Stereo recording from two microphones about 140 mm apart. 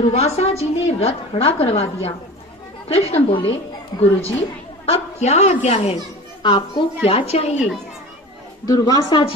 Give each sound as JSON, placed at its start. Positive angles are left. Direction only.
{"t": 0.1, "sound": "a woman's voice", "side_deg": 50}
{"t": 6.4, "sound": "a child's voice", "side_deg": 35}
{"t": 7.1, "sound": "a woman's voice", "side_deg": 45}
{"t": 7.5, "sound": "a child's voice", "side_deg": -10}
{"t": 8.6, "sound": "a woman's voice", "side_deg": 25}